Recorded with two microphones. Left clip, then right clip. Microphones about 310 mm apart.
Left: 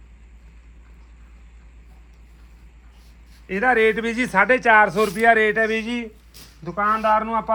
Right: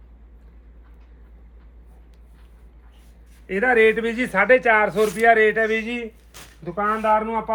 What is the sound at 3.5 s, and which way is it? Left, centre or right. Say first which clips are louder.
Speech: right 1 dB; left.